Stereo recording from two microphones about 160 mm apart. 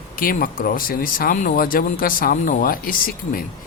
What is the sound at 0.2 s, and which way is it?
Speech, 65° left (ahead or behind).